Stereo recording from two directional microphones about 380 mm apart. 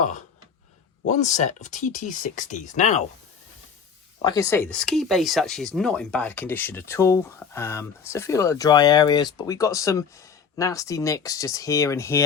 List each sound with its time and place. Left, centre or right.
1.0 s speech: centre
4.2 s speech: centre